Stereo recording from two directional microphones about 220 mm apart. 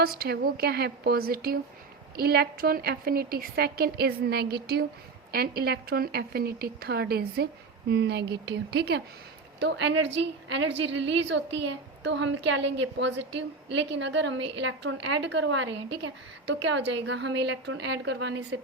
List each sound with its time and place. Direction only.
0.0 s a woman's voice: 45° right (ahead or behind)